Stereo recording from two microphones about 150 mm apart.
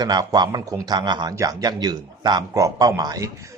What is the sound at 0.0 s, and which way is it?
Speech, 25° right (ahead or behind).